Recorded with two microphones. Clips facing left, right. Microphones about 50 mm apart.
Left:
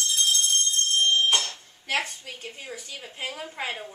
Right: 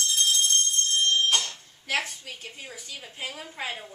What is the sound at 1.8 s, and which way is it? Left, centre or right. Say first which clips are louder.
A woman's voice: left 1 dB; centre.